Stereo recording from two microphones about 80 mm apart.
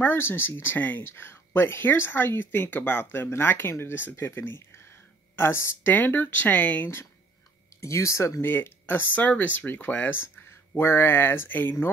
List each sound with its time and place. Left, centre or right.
0.0 s speech: left
7.8 s speech: left